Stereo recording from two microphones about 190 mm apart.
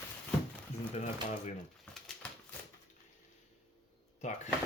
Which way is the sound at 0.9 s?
35° left (ahead or behind).